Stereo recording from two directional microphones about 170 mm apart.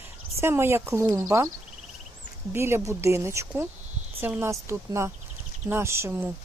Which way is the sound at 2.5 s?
15° right (ahead or behind).